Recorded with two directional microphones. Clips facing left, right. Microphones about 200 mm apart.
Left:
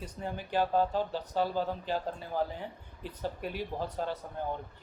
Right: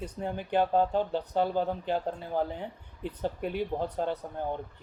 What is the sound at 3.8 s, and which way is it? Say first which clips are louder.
Speech: right 4 dB; 20° right (ahead or behind).